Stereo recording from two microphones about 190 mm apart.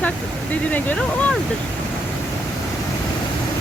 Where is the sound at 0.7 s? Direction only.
10° left (ahead or behind).